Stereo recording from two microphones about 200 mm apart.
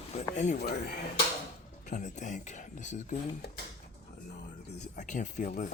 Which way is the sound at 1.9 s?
35° left (ahead or behind).